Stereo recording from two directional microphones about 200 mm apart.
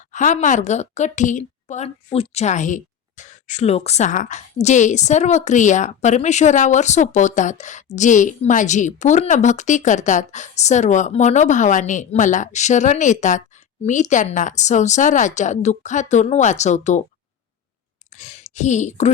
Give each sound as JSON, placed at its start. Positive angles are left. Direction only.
{"t": 0.1, "sound": "a woman's voice", "side_deg": 40}
{"t": 18.2, "sound": "a woman's voice", "side_deg": 35}